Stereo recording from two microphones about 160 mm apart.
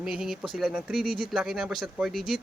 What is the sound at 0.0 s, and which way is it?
Speech, 5° right (ahead or behind).